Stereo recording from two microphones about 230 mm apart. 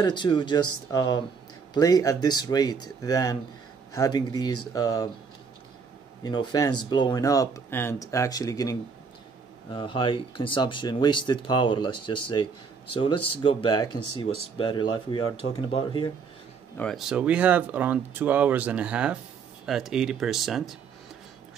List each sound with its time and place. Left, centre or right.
0.0 s speech: centre
6.2 s speech: centre
16.7 s speech: centre